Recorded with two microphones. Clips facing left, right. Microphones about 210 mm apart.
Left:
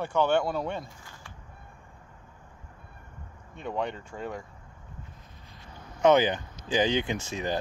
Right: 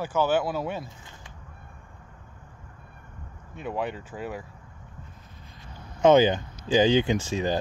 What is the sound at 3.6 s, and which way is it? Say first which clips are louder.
Speech: right 1 dB; 5° right (ahead or behind).